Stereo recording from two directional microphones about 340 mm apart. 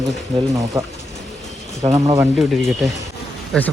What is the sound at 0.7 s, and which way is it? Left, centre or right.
Speech, centre.